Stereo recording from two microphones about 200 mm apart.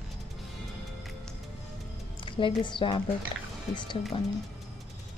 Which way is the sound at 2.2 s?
25° left (ahead or behind).